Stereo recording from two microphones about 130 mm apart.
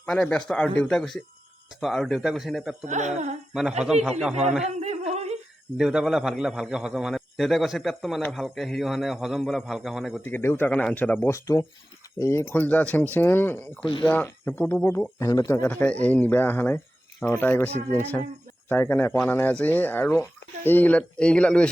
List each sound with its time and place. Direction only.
0.0 s a man's voice: 10° left (ahead or behind)
2.8 s speech: 65° right (ahead or behind)
3.5 s a woman's voice: 5° right (ahead or behind)
4.6 s a sound: 60° right (ahead or behind)
5.7 s a man's voice: 5° right (ahead or behind)
10.2 s speech: 15° left (ahead or behind)